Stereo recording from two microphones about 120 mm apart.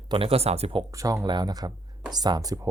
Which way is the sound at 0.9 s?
25° right (ahead or behind).